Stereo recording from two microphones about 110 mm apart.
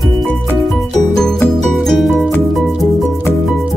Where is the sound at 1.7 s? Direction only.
Centre (ahead or behind).